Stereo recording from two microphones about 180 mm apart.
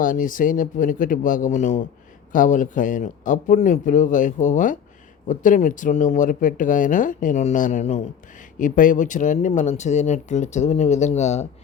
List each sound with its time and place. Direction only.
0.0 s speech: 50° left (ahead or behind)